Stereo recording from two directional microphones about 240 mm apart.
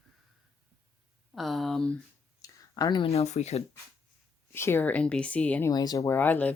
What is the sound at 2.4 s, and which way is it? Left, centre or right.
Speech, centre.